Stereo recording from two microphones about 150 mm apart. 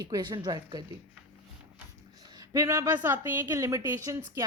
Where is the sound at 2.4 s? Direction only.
20° right (ahead or behind).